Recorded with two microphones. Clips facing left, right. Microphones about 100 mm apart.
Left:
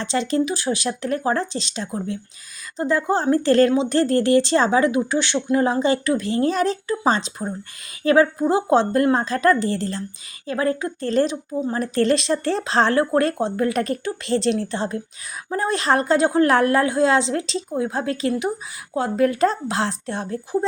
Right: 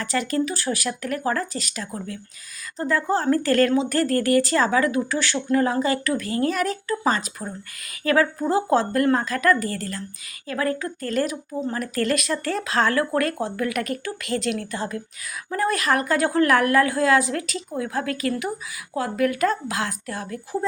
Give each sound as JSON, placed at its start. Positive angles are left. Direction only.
{"t": 0.0, "sound": "speech", "side_deg": 25}